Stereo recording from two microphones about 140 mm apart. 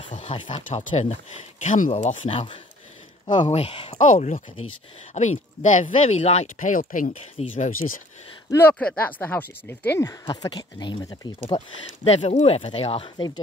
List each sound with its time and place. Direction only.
0.3 s speech: 40° left (ahead or behind)
0.8 s speech: 55° left (ahead or behind)
2.2 s speech: 40° left (ahead or behind)
4.0 s speech: 60° left (ahead or behind)
8.5 s speech: 15° left (ahead or behind)
10.2 s speech: 30° left (ahead or behind)